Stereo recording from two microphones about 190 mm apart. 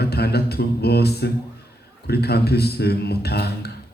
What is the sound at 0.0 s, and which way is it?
Mantra, 55° left (ahead or behind).